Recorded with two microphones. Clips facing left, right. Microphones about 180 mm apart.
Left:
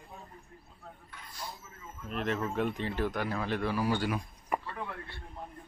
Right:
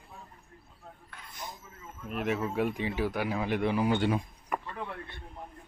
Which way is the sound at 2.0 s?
10° right (ahead or behind).